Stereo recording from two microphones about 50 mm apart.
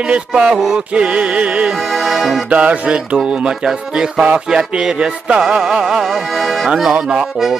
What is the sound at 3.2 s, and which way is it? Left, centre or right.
Music, centre.